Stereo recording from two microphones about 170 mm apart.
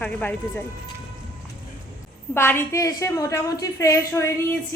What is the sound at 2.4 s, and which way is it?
A woman's voice, 15° left (ahead or behind).